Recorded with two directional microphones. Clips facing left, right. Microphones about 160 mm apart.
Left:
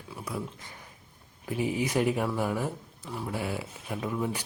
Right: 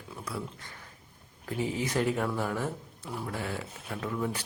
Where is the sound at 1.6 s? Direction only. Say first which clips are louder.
Left 2 dB; 15° left (ahead or behind).